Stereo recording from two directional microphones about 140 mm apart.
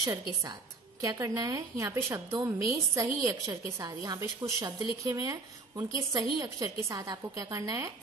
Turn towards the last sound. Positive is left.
turn(degrees=-20)  # may be behind; listen again after turning